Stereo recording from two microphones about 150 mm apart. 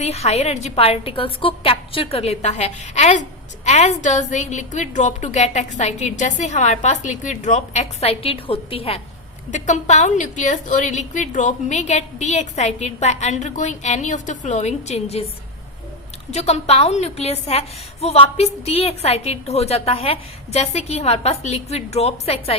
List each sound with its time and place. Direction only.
0.0 s a woman's voice: 45° left (ahead or behind)
9.5 s a woman's voice: 55° left (ahead or behind)
16.3 s a woman's voice: 45° left (ahead or behind)